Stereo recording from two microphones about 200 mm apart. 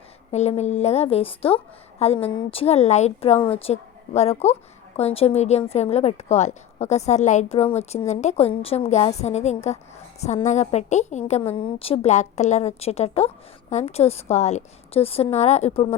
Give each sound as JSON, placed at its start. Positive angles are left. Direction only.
{"t": 0.3, "sound": "a woman's voice", "side_deg": 35}